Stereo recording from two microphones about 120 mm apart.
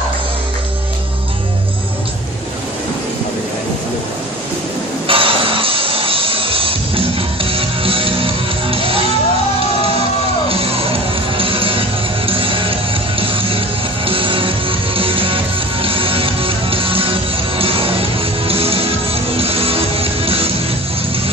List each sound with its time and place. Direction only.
5.0 s music: 50° right (ahead or behind)
10.5 s music: 50° right (ahead or behind)